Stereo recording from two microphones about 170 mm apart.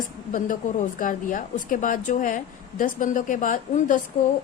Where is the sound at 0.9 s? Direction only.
50° left (ahead or behind).